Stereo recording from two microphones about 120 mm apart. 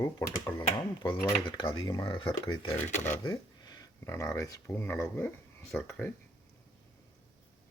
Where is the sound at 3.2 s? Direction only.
35° left (ahead or behind).